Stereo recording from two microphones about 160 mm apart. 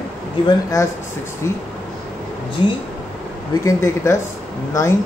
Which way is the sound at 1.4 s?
20° left (ahead or behind).